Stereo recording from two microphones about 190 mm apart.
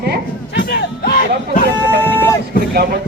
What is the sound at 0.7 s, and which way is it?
Music, 50° left (ahead or behind).